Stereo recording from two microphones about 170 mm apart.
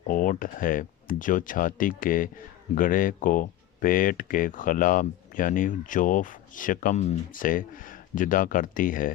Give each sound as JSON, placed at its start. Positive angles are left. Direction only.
{"t": 0.1, "sound": "speech", "side_deg": 55}